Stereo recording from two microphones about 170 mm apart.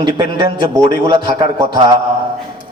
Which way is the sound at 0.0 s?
25° right (ahead or behind).